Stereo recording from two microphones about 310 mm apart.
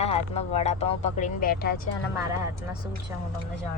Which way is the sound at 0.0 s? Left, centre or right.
Centre.